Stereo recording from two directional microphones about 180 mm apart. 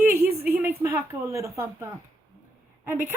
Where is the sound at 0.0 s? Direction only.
15° right (ahead or behind).